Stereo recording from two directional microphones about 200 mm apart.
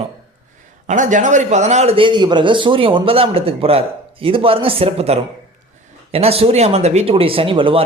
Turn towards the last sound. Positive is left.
turn(degrees=-25)  # may be behind; listen again after turning